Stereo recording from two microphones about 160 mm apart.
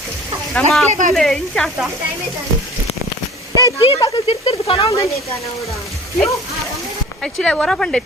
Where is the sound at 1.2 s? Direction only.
Centre (ahead or behind).